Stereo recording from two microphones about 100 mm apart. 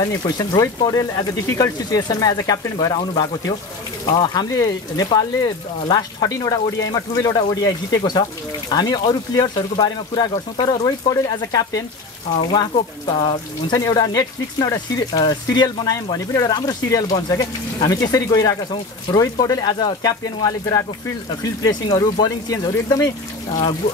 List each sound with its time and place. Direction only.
0.0 s speech: 40° left (ahead or behind)
10.3 s speech: 45° left (ahead or behind)
13.0 s speech: 50° left (ahead or behind)
21.8 s speech: 45° left (ahead or behind)